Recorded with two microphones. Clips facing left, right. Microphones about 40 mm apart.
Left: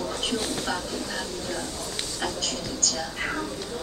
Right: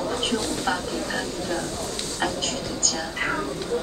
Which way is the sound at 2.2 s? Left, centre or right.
Right.